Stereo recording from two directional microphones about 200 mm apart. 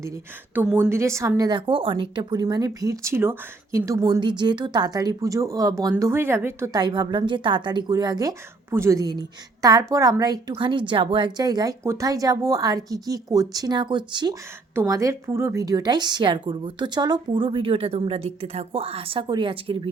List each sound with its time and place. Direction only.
0.5 s a woman's voice: 10° right (ahead or behind); by 19.9 s 25° right (ahead or behind)